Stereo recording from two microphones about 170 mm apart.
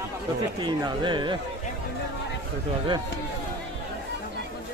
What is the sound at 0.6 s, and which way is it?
Speech, 25° right (ahead or behind).